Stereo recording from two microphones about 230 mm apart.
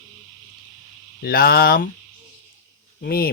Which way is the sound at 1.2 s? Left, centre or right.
Left.